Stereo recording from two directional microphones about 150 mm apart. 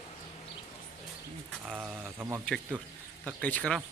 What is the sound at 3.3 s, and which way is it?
Speech, 10° left (ahead or behind).